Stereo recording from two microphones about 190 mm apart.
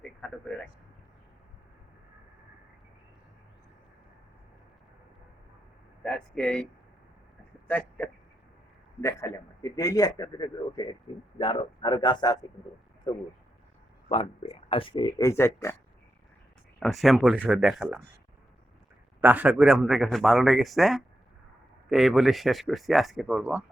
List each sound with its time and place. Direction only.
0.0 s a sound: 5° left (ahead or behind)
6.0 s speech: 5° left (ahead or behind)
7.7 s a man's voice: 10° left (ahead or behind)
14.1 s a man's voice: 30° left (ahead or behind); by 15.7 s 15° left (ahead or behind)
16.8 s speech: centre (ahead or behind)
19.2 s speech: 10° right (ahead or behind)